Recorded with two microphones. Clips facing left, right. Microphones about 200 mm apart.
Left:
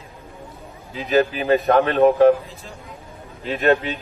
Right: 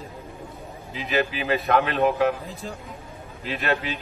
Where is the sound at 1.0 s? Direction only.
40° left (ahead or behind).